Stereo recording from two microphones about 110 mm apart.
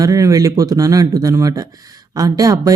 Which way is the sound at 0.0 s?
30° right (ahead or behind).